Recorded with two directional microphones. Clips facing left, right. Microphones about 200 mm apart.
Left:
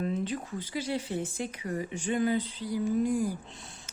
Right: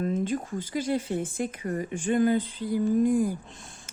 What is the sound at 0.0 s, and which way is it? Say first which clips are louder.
Speech: right 4 dB; 45° right (ahead or behind).